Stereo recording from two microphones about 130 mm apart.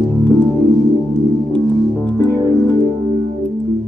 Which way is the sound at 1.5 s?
5° left (ahead or behind).